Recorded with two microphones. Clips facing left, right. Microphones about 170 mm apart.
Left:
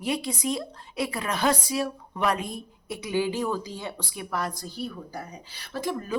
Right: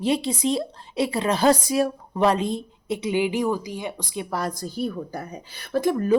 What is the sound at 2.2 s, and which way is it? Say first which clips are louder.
Speech: right 6 dB; 30° right (ahead or behind).